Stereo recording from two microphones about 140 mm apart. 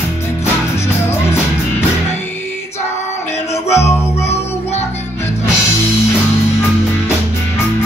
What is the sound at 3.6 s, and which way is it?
Music, 20° left (ahead or behind).